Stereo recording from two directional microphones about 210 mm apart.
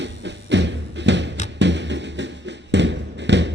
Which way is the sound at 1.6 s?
55° right (ahead or behind).